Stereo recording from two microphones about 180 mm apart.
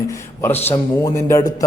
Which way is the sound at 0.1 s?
10° left (ahead or behind).